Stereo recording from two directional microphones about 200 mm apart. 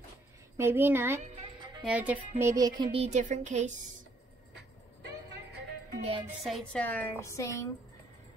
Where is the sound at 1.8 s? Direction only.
5° right (ahead or behind); by 3.7 s 35° right (ahead or behind).